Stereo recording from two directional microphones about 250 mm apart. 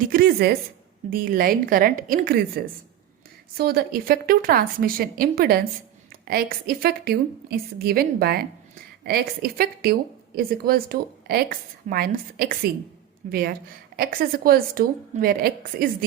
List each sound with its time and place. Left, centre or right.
0.1 s a woman's voice: right
3.6 s a woman's voice: right